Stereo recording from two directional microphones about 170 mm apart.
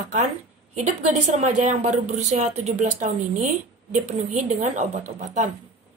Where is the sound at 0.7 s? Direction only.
45° right (ahead or behind).